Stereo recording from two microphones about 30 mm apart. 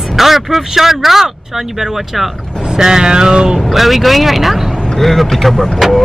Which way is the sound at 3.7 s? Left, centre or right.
Centre.